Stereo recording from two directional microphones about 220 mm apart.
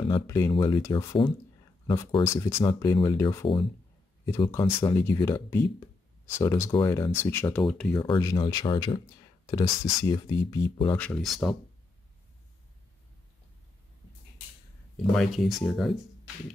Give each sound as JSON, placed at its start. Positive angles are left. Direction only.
{"t": 0.1, "sound": "speech", "side_deg": 15}
{"t": 8.0, "sound": "speech", "side_deg": 20}
{"t": 11.0, "sound": "speech", "side_deg": 5}
{"t": 15.1, "sound": "speech", "side_deg": 0}